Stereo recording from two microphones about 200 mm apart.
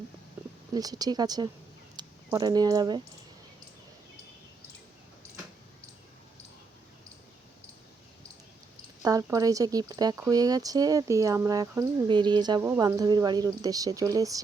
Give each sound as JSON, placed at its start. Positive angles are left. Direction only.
{"t": 0.7, "sound": "speech", "side_deg": -20}
{"t": 9.0, "sound": "speech", "side_deg": -15}